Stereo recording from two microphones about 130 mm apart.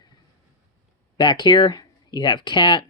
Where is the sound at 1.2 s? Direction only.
35° left (ahead or behind).